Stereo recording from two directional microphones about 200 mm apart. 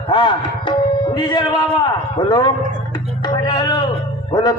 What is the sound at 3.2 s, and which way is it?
Music, 20° left (ahead or behind).